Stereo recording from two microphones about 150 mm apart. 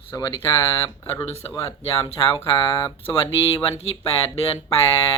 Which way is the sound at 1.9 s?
35° left (ahead or behind).